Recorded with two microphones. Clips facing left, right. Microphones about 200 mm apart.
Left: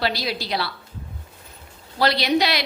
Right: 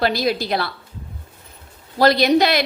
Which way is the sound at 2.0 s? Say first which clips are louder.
Right 5 dB; 50° right (ahead or behind).